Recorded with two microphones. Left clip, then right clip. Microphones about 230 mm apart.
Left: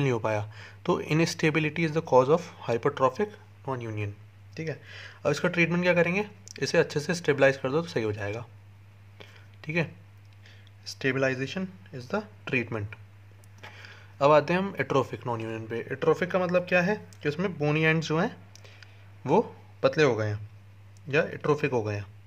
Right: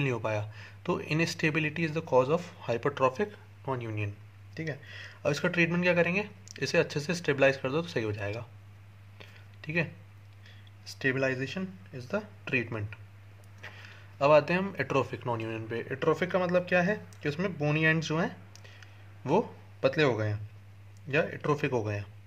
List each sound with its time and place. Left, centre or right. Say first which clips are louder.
0.0 s speech: left 4 dB; centre
9.2 s a sound: left 1 dB; centre
10.4 s speech: left 5 dB; centre